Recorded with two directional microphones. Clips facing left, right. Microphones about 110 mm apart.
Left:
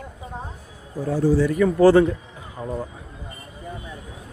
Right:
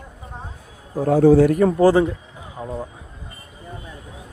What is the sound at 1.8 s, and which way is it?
Speech, 15° right (ahead or behind).